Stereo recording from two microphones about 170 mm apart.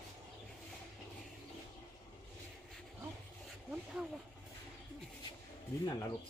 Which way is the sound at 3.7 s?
5° right (ahead or behind).